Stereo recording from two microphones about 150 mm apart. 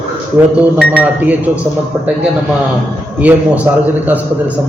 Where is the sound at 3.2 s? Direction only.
10° right (ahead or behind).